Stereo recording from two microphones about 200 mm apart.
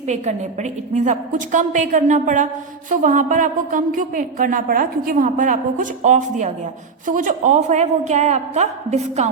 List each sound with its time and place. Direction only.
0.1 s a woman's voice: 35° right (ahead or behind)